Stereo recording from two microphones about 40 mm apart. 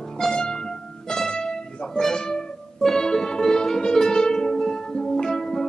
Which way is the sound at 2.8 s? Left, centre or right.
Centre.